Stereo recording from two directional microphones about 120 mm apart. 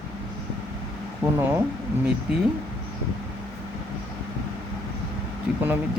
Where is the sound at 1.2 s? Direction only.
20° right (ahead or behind).